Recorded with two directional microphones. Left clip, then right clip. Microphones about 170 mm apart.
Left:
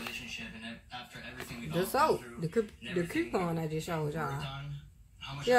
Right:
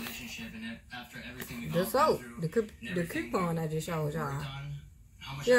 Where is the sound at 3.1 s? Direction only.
5° left (ahead or behind).